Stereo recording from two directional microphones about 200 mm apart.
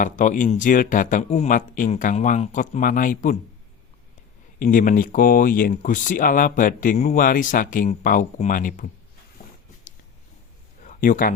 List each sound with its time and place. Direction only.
0.0 s speech: 40° left (ahead or behind)
4.6 s speech: 45° left (ahead or behind)
10.8 s speech: 40° left (ahead or behind)